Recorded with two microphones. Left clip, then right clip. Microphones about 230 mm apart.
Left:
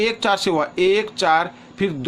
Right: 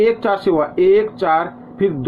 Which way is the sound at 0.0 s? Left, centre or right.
Left.